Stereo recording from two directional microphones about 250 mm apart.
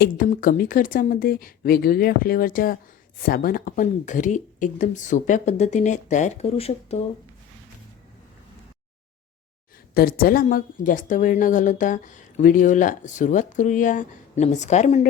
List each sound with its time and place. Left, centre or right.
0.0 s a woman's voice: left
9.9 s a woman's voice: left